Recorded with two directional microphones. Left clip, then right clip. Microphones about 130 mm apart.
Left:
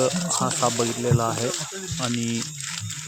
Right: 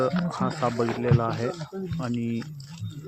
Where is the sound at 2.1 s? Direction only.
35° left (ahead or behind).